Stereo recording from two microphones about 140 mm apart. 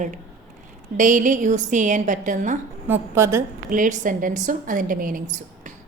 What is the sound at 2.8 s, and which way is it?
Speech, 15° right (ahead or behind).